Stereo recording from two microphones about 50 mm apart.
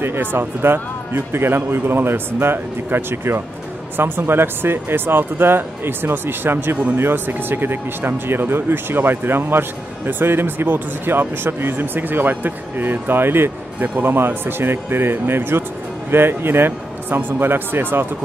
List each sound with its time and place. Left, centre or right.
0.0 s speech: right